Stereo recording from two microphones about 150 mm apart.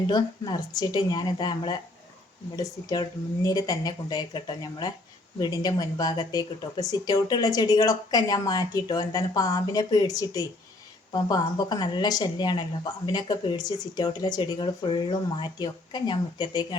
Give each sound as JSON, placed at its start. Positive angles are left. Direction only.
{"t": 0.1, "sound": "speech", "side_deg": 30}